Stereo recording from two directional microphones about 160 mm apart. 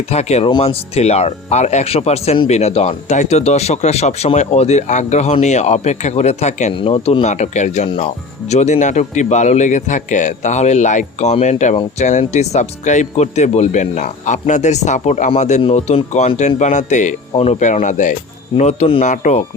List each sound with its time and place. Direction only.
0.1 s speech: 45° left (ahead or behind)